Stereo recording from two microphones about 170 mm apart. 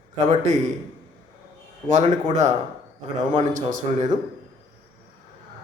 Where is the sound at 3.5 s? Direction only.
50° right (ahead or behind).